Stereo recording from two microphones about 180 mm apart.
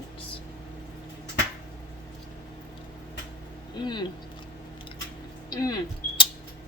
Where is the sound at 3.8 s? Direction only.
25° left (ahead or behind).